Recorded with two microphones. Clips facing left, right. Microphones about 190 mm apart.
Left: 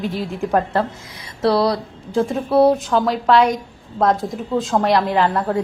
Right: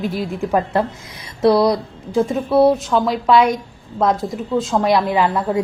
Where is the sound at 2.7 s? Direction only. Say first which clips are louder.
Even; centre (ahead or behind).